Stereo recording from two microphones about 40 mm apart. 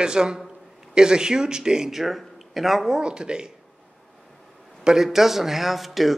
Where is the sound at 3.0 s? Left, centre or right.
Right.